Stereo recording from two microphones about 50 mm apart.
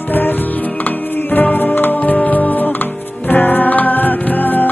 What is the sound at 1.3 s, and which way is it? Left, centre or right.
Music, left.